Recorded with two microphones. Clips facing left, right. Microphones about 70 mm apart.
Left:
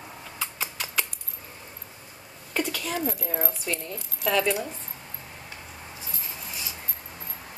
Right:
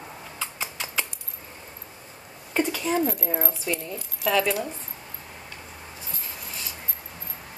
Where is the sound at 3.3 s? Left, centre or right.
Centre.